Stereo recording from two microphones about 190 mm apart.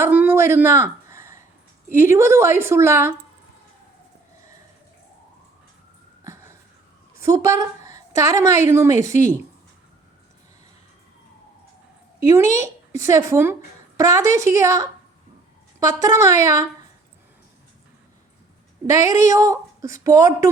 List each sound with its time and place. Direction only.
0.0 s a sound: 10° right (ahead or behind)
1.9 s speech: 15° right (ahead or behind)
6.2 s a sound: 15° right (ahead or behind)
7.2 s a woman's voice: 15° right (ahead or behind)
12.5 s speech: 15° right (ahead or behind)
18.9 s speech: 15° right (ahead or behind)